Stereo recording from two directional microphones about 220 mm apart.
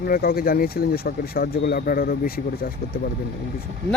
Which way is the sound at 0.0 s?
40° left (ahead or behind).